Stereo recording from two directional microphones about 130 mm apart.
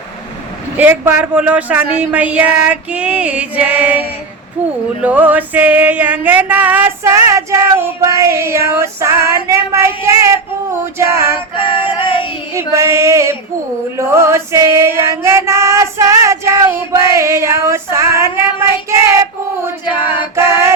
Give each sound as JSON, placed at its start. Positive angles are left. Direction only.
{"t": 0.8, "sound": "a sound", "side_deg": -15}
{"t": 5.0, "sound": "a sound", "side_deg": -10}
{"t": 7.3, "sound": "female singing", "side_deg": -25}
{"t": 11.5, "sound": "female singing", "side_deg": 40}
{"t": 12.5, "sound": "female singing", "side_deg": -20}
{"t": 18.9, "sound": "child singing", "side_deg": -20}
{"t": 19.8, "sound": "choir", "side_deg": 40}
{"t": 20.3, "sound": "female singing", "side_deg": -20}